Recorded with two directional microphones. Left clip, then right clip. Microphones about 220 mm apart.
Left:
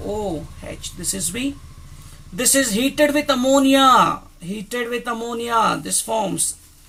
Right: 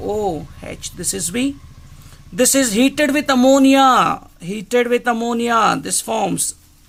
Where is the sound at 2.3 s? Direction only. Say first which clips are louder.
Right 4 dB; 40° right (ahead or behind).